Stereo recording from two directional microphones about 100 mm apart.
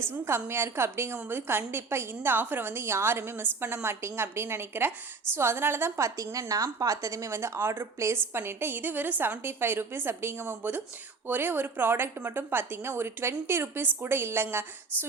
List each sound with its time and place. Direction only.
0.0 s a woman's voice: 25° right (ahead or behind)